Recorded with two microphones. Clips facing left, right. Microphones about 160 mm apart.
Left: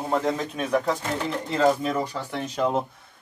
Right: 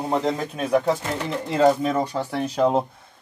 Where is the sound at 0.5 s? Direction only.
35° right (ahead or behind).